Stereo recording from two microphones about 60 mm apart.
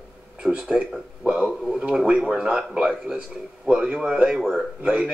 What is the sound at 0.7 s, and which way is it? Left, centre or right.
Speech, centre.